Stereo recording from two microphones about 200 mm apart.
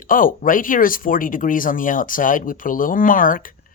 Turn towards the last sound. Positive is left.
turn(degrees=45)  # may be behind; listen again after turning